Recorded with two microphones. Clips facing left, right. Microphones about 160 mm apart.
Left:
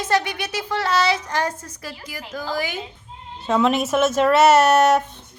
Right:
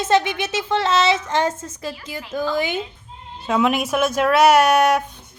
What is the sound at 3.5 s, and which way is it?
Speech, 5° right (ahead or behind).